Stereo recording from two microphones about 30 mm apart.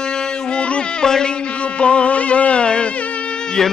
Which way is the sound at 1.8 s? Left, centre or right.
Left.